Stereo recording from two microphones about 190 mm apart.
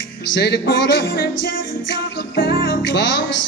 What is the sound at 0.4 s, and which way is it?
Music, 60° left (ahead or behind).